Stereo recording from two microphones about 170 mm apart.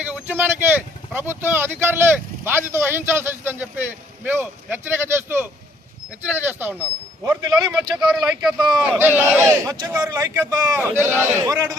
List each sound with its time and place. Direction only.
0.0 s speech: 10° right (ahead or behind)
9.6 s speech: 20° right (ahead or behind)